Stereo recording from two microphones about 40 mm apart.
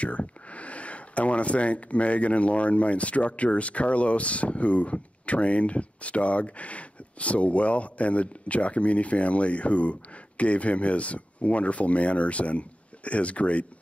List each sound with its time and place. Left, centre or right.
0.0 s speech: left